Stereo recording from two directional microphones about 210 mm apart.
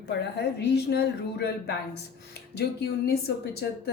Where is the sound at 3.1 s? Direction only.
50° left (ahead or behind).